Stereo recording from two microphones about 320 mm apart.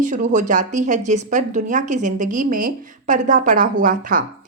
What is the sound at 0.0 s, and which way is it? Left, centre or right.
A woman's voice, right.